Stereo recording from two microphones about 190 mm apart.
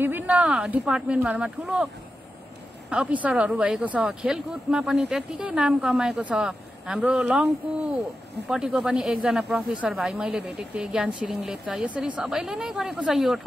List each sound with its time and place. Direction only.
0.0 s speech: 10° right (ahead or behind)
2.9 s speech: 5° right (ahead or behind)